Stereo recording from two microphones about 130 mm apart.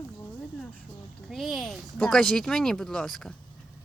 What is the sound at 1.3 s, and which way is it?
Speech, centre (ahead or behind).